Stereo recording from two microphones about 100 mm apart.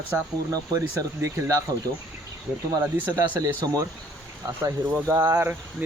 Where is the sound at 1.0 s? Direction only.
35° right (ahead or behind).